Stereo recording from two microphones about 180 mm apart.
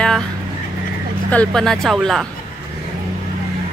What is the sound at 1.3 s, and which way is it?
Speech, 5° left (ahead or behind).